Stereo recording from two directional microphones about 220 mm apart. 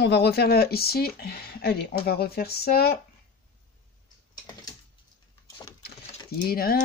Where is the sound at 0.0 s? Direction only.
50° left (ahead or behind).